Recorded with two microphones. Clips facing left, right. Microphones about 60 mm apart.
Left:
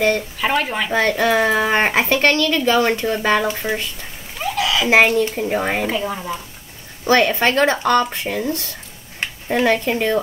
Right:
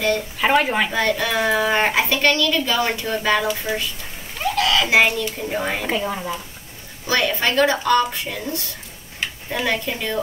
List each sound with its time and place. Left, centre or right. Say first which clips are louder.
0.4 s speech: right 2 dB; centre
0.9 s a woman's voice: left 4 dB; left
4.4 s a sound: right 1 dB; centre
4.8 s a woman's voice: left 3 dB; left
5.9 s a woman's voice: left 1 dB; centre
7.1 s a woman's voice: left 5 dB; left